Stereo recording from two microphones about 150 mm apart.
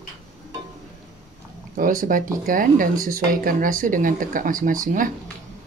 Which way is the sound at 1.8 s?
65° right (ahead or behind).